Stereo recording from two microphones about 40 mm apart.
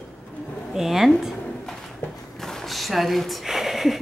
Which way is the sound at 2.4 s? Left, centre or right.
Centre.